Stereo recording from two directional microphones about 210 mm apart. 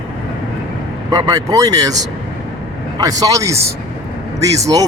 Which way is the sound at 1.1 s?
20° right (ahead or behind).